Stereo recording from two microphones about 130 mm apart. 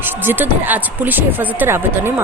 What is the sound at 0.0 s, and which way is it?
Speech, 15° right (ahead or behind).